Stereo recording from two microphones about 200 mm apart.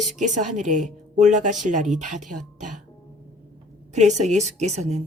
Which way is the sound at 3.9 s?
35° right (ahead or behind).